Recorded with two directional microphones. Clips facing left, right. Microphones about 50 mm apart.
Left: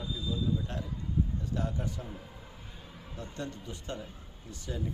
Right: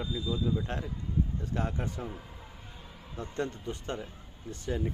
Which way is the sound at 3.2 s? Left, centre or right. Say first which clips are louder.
Right 5 dB; right.